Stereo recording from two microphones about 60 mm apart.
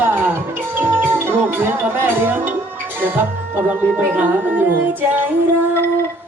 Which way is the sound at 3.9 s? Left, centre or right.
Right.